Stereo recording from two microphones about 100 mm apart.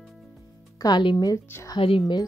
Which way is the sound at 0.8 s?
50° left (ahead or behind).